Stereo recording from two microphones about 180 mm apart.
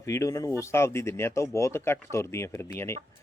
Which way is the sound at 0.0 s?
15° left (ahead or behind).